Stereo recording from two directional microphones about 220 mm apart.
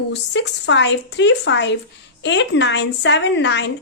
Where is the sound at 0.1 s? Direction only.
55° left (ahead or behind).